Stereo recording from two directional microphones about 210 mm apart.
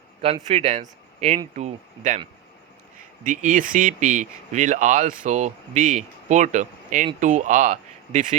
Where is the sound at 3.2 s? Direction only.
40° right (ahead or behind).